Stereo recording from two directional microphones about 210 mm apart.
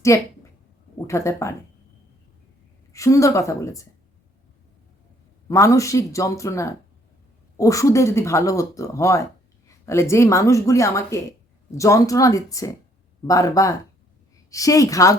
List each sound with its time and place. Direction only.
0.1 s speech: 15° left (ahead or behind)
2.9 s speech: 15° left (ahead or behind)
5.5 s speech: 15° left (ahead or behind)